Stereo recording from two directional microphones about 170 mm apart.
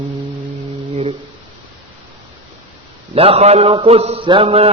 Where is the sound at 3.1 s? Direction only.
35° right (ahead or behind).